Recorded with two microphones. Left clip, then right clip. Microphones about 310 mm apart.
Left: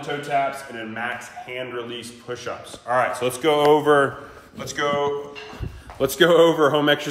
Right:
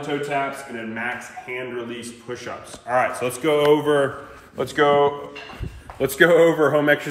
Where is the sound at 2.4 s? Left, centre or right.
Centre.